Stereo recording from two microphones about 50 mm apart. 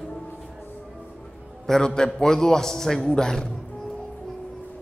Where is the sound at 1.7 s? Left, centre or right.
Centre.